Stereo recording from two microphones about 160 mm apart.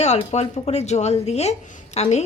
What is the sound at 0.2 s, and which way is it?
A woman's voice, 45° left (ahead or behind).